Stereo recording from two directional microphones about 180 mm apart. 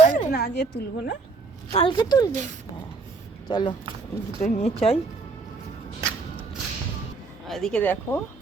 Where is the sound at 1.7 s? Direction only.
25° left (ahead or behind).